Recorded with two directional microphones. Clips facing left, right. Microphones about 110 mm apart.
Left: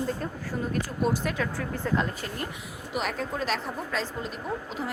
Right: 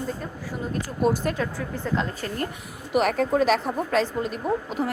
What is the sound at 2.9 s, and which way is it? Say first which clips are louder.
A woman's voice: right 9 dB; 60° right (ahead or behind).